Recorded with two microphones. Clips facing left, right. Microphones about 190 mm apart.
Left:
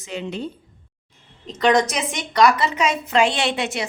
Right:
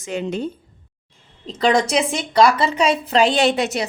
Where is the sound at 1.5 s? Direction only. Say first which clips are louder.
Right 1 dB; 30° right (ahead or behind).